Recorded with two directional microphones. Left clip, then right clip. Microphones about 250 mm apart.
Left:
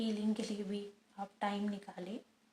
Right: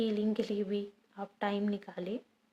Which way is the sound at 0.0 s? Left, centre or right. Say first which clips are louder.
Right 6 dB; right.